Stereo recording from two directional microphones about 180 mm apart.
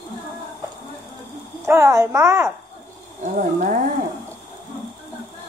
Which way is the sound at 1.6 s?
15° right (ahead or behind).